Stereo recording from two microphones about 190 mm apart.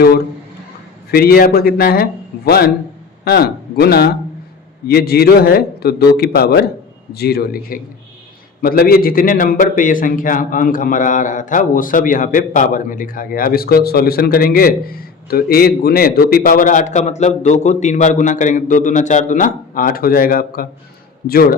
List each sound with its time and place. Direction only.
1.1 s a man's voice: 55° left (ahead or behind)